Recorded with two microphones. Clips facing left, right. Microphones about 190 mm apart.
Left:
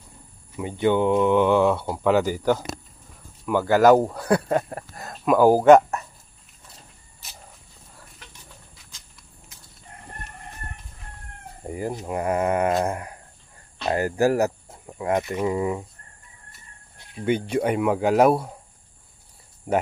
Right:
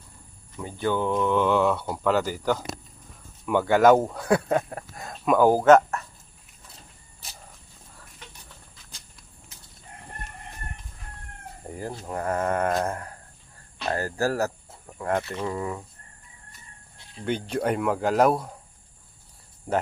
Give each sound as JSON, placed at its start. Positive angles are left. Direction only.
{"t": 0.5, "sound": "speech", "side_deg": 20}
{"t": 3.4, "sound": "speech", "side_deg": 5}
{"t": 11.7, "sound": "speech", "side_deg": 10}
{"t": 17.2, "sound": "speech", "side_deg": 10}